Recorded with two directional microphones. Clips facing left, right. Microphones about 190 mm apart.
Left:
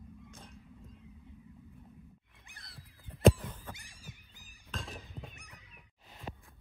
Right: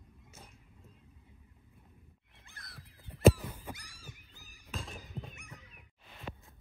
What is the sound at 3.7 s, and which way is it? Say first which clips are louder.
Cat: even; 15° left (ahead or behind).